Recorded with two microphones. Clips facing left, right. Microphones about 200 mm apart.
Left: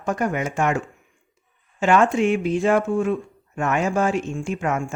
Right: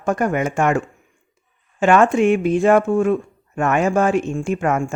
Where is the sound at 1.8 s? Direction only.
55° right (ahead or behind).